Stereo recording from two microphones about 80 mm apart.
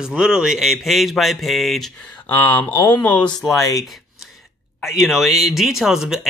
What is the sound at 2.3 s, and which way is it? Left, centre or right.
Speech, left.